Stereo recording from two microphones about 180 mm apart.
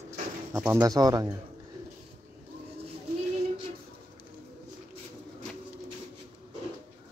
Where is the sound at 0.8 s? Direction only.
20° right (ahead or behind).